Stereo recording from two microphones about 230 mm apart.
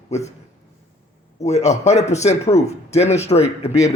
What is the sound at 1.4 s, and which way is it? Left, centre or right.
A man's voice, left.